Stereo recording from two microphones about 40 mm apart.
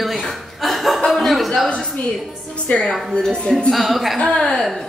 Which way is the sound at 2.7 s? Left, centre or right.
Left.